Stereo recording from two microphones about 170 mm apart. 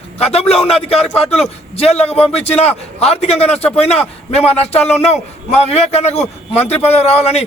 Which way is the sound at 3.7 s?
5° left (ahead or behind).